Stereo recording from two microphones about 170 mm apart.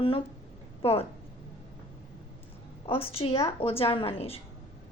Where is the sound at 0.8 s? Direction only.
35° left (ahead or behind).